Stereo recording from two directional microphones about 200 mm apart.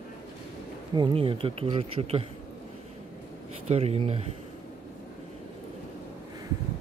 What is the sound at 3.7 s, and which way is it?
Speech, 30° right (ahead or behind).